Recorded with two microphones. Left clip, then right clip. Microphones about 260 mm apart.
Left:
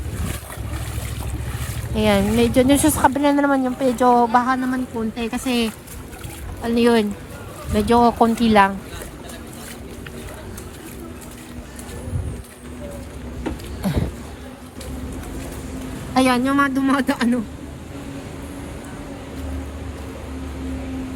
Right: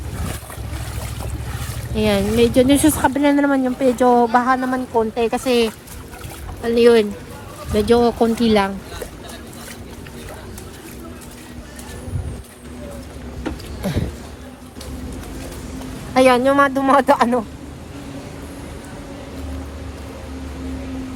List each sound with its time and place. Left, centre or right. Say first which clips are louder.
2.0 s speech: right 1 dB; left; by 5.5 s centre
6.6 s speech: right 5 dB; centre
13.8 s a sound: right 1 dB; centre
16.1 s speech: right 5 dB; centre